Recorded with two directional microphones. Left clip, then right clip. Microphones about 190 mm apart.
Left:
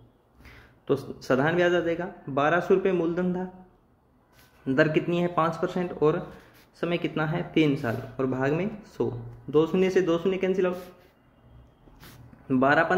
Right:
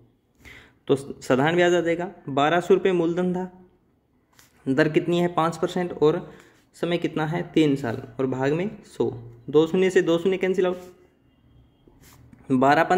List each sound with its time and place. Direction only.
0.4 s speech: 25° right (ahead or behind)
4.6 s speech: 20° right (ahead or behind)
12.4 s speech: 25° right (ahead or behind)